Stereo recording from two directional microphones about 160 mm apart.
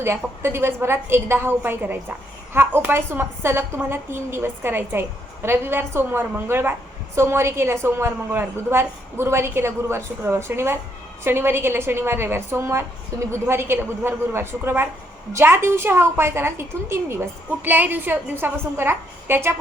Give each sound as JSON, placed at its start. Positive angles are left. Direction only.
{"t": 0.0, "sound": "a woman's voice", "side_deg": -15}